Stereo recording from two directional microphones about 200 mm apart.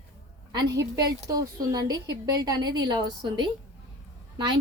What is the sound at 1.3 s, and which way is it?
A woman's voice, 20° right (ahead or behind).